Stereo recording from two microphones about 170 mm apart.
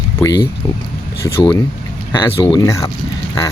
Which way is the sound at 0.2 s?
20° left (ahead or behind).